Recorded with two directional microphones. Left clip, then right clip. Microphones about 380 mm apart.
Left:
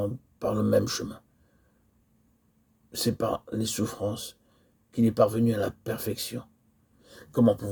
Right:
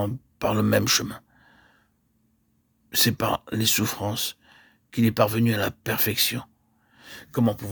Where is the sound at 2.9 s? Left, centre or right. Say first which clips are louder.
Right 5 dB; right.